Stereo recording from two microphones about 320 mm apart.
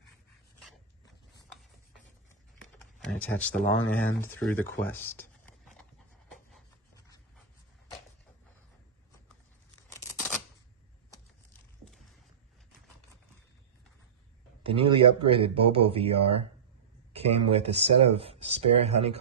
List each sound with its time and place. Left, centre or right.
2.6 s a sound: centre
3.9 s speech: centre
14.6 s speech: centre